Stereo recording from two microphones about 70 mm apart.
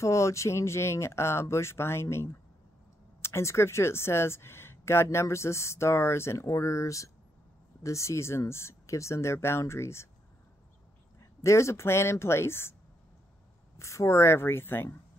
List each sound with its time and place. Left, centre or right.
0.0 s speech: left
11.1 s speech: left
13.7 s speech: left